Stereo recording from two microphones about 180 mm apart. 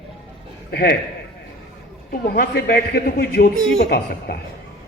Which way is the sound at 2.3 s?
55° left (ahead or behind).